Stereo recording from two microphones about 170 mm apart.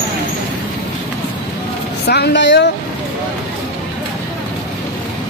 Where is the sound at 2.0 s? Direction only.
75° left (ahead or behind); by 2.7 s 90° left.